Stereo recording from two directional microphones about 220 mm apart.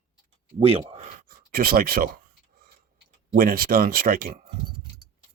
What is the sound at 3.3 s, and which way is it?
Speech, 40° right (ahead or behind).